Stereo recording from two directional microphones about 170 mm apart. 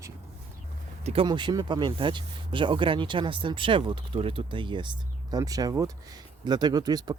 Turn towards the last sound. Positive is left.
turn(degrees=-20)  # may be behind; listen again after turning